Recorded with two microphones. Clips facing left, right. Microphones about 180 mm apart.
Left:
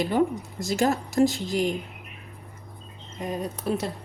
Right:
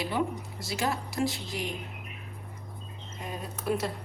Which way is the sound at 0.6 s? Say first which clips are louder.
Left 8 dB; 45° left (ahead or behind).